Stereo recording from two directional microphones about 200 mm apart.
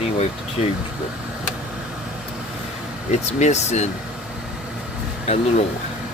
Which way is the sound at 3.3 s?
35° left (ahead or behind).